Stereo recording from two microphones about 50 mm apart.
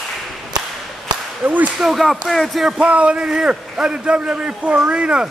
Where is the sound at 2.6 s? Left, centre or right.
Right.